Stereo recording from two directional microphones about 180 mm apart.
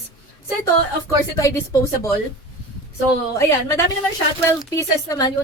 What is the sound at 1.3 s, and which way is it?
Speech, 20° left (ahead or behind).